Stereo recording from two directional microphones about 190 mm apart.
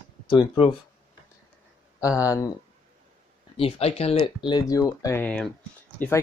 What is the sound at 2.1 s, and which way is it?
Speech, 15° left (ahead or behind).